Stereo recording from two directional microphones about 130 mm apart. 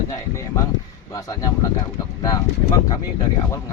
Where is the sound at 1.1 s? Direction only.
25° left (ahead or behind).